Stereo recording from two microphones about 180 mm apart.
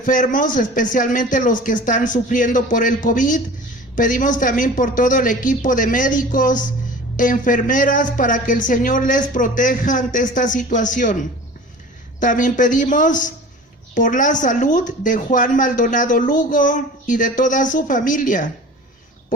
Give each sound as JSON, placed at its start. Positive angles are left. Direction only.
{"t": 0.0, "sound": "speech", "side_deg": 45}